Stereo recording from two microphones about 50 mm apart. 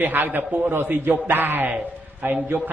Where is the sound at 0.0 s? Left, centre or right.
Right.